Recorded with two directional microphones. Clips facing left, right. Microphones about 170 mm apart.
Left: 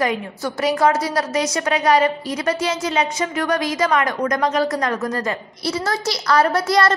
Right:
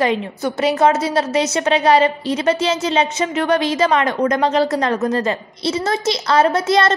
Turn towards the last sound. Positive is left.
turn(degrees=-20)  # may be behind; listen again after turning